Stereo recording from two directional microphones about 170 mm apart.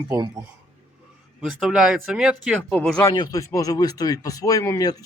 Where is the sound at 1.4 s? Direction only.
Centre (ahead or behind).